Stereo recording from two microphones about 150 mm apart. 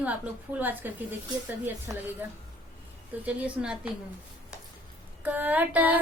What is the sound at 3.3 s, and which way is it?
Female singing, 10° right (ahead or behind).